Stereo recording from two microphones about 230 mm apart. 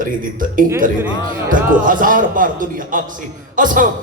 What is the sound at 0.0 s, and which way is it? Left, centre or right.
A man's voice, right.